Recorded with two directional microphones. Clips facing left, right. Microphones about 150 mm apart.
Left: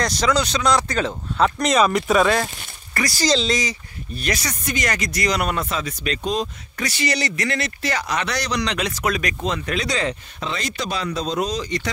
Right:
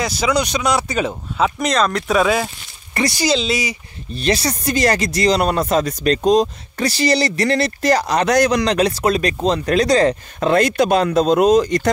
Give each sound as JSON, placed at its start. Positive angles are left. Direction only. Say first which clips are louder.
{"t": 0.0, "sound": "speech", "louder": "right 2 dB", "side_deg": -5}
{"t": 2.9, "sound": "speech", "louder": "right 4 dB", "side_deg": -20}
{"t": 3.3, "sound": "speech", "louder": "left 1 dB", "side_deg": -5}
{"t": 4.1, "sound": "speech", "louder": "right 7 dB", "side_deg": -30}